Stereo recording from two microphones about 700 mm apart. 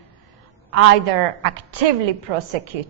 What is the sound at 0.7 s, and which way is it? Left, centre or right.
A woman's voice, right.